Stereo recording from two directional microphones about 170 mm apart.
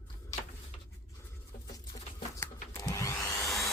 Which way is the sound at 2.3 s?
15° left (ahead or behind).